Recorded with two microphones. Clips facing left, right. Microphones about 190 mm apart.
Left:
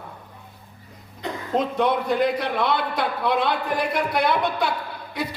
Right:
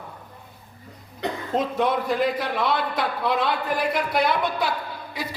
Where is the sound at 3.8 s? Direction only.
55° left (ahead or behind).